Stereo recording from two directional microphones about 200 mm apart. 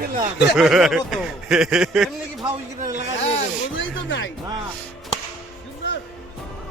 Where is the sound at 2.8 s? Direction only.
40° right (ahead or behind).